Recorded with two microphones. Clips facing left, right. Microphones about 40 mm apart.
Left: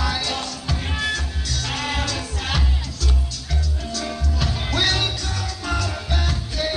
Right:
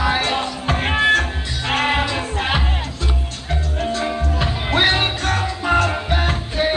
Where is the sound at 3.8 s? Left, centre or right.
Right.